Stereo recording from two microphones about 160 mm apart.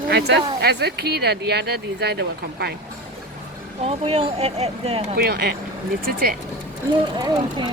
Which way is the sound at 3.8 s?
35° right (ahead or behind).